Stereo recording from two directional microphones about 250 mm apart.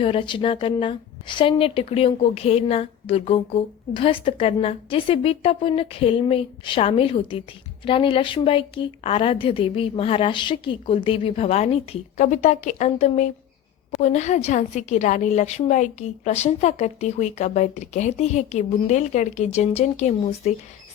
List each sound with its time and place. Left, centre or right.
0.0 s a woman's voice: left